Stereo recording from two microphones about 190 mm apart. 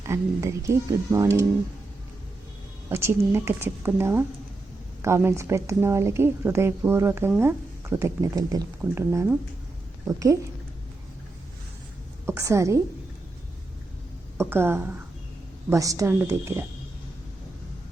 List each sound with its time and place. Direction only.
0.0 s speech: 15° right (ahead or behind)
2.9 s speech: 15° right (ahead or behind)
12.2 s speech: 15° right (ahead or behind)
14.3 s a woman's voice: 10° right (ahead or behind)